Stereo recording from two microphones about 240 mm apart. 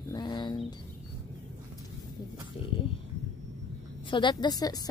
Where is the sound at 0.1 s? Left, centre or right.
Centre.